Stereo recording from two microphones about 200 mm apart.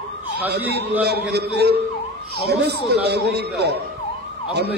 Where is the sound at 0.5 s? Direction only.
55° right (ahead or behind).